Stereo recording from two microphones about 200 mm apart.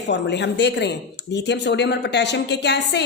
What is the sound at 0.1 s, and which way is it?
A woman's voice, 60° left (ahead or behind).